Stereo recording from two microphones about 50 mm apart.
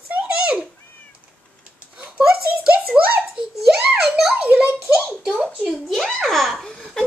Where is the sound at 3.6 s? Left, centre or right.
Centre.